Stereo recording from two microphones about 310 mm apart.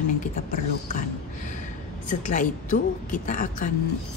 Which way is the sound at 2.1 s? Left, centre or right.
Left.